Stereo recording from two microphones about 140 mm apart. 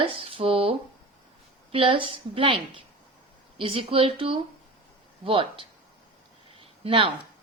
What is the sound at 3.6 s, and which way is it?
Speech, 40° right (ahead or behind).